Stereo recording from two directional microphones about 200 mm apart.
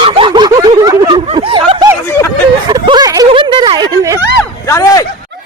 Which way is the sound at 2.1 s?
15° left (ahead or behind).